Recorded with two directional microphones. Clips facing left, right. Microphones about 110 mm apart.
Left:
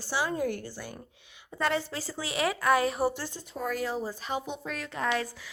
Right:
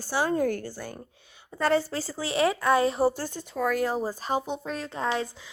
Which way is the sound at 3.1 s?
45° right (ahead or behind).